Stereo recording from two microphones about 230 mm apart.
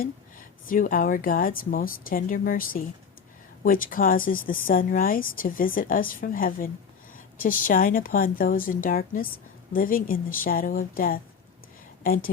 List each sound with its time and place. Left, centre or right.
0.0 s speech: left